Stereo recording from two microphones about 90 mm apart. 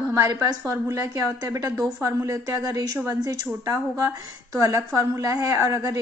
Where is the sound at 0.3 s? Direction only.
45° right (ahead or behind).